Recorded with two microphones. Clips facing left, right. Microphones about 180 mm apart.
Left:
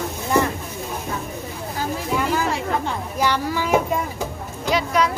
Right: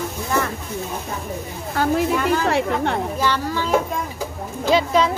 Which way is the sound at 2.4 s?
65° right (ahead or behind).